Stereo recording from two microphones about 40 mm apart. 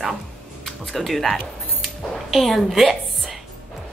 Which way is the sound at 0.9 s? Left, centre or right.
Centre.